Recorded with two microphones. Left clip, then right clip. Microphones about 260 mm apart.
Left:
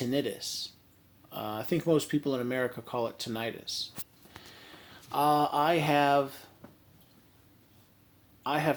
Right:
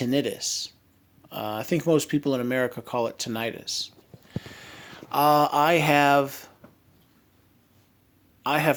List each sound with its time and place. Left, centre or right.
0.0 s speech: right
8.4 s speech: right